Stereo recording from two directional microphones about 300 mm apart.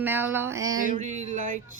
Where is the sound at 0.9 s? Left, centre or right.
Right.